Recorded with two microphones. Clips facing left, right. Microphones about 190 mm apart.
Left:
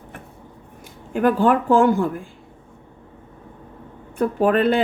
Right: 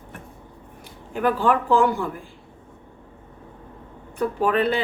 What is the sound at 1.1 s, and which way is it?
Speech, 45° left (ahead or behind).